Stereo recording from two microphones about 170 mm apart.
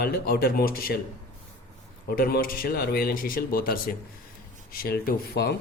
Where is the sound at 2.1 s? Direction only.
60° left (ahead or behind).